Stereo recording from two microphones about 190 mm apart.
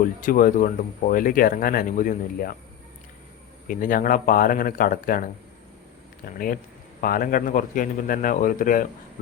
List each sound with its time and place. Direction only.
0.0 s speech: 45° left (ahead or behind)
3.7 s speech: 45° left (ahead or behind)